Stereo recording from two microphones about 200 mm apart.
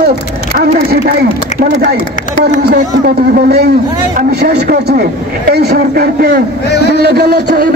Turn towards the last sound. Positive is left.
turn(degrees=-50)  # may be behind; listen again after turning